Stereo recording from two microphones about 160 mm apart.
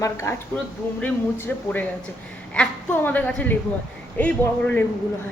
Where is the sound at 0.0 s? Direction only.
15° left (ahead or behind).